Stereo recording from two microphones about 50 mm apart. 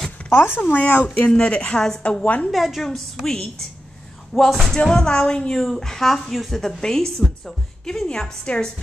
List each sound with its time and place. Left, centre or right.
0.2 s a sound: left
0.6 s speech: left; by 2.0 s centre
2.2 s speech: left
2.5 s a woman's voice: centre